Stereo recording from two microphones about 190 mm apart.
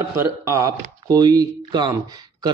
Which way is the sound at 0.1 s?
15° right (ahead or behind).